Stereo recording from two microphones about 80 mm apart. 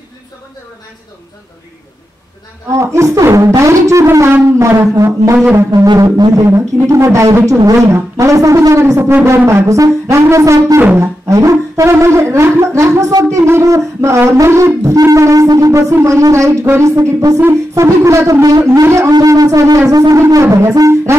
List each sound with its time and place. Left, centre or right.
2.7 s wind instrument: right
5.9 s shofar: right
6.3 s wind instrument: right
16.9 s shofar: right
17.7 s wind instrument: right
19.2 s shofar: right
20.4 s wind instrument: right